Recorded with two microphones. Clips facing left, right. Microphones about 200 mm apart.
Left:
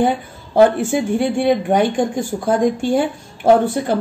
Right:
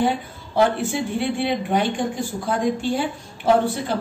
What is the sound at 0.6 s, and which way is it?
A woman's voice, 50° left (ahead or behind).